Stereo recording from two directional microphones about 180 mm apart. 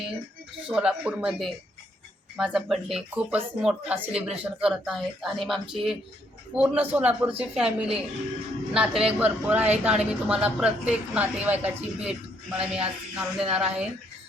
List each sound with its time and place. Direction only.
0.7 s a woman's voice: 5° right (ahead or behind)